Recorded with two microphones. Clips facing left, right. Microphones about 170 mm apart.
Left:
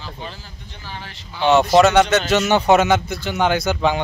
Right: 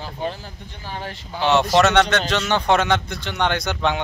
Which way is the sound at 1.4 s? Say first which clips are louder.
Left 3 dB; centre (ahead or behind).